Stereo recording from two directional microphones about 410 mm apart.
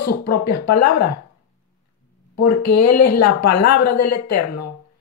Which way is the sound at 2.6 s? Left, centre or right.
Left.